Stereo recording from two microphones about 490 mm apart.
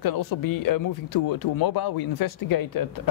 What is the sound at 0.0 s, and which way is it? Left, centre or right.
Speech, left.